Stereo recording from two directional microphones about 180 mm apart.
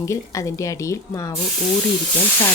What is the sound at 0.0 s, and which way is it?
Speech, 15° left (ahead or behind).